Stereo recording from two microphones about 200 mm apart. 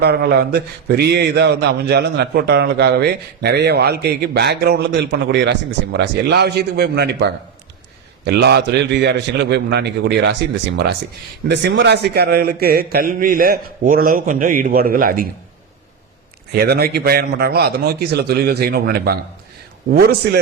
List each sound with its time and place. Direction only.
0.0 s a man's voice: 50° right (ahead or behind)
11.4 s a man's voice: 60° right (ahead or behind)
16.6 s a man's voice: 50° right (ahead or behind)